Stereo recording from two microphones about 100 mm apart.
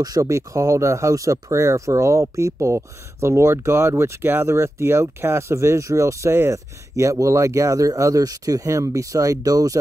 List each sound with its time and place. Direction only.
0.0 s speech: 35° right (ahead or behind)